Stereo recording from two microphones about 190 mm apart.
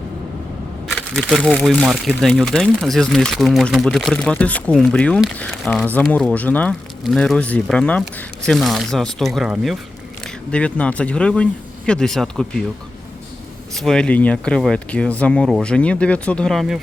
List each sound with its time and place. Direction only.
0.9 s speech: 5° left (ahead or behind)
13.7 s speech: 5° left (ahead or behind)